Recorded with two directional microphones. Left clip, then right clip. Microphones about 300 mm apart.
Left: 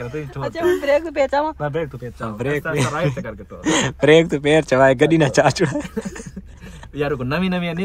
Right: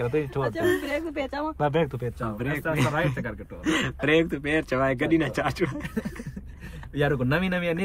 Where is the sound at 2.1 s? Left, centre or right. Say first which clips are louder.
Left 11 dB; centre.